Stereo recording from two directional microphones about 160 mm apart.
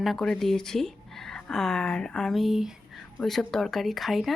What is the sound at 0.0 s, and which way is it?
Speech, centre (ahead or behind).